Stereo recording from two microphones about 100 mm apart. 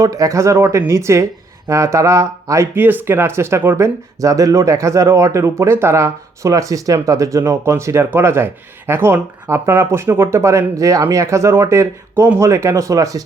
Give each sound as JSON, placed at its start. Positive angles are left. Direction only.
{"t": 0.0, "sound": "speech", "side_deg": -35}